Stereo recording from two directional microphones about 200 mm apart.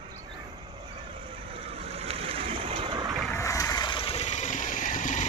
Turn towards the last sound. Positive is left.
turn(degrees=40)  # may be behind; listen again after turning